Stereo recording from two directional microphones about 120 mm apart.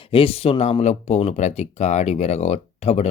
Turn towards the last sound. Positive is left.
turn(degrees=60)  # may be behind; listen again after turning